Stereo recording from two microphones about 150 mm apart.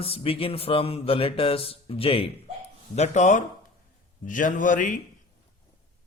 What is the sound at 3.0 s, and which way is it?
A man's voice, 50° left (ahead or behind).